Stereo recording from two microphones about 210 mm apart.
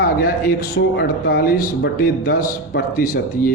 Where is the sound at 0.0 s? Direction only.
45° left (ahead or behind).